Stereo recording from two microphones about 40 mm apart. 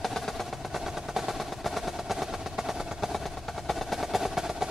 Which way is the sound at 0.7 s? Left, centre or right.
Centre.